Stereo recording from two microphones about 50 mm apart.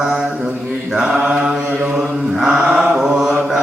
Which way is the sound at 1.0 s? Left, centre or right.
Centre.